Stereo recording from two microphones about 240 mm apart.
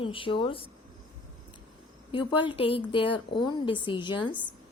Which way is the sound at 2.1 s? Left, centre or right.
Left.